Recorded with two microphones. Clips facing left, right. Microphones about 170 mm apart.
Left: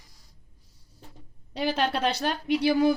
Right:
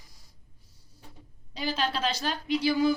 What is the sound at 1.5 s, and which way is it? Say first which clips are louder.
A woman's voice: left 4 dB; 60° left (ahead or behind).